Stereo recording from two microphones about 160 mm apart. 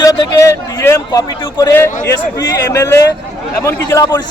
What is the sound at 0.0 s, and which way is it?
A man's voice, 20° left (ahead or behind).